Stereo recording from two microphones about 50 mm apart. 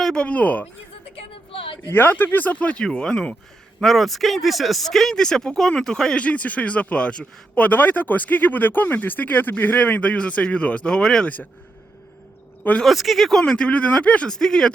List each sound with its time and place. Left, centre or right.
0.0 s a sound: centre
0.3 s speech: left
1.9 s speech: left
2.7 s speech: centre
3.8 s speech: centre
6.1 s speech: left
12.8 s speech: centre
13.4 s speech: left
14.3 s speech: centre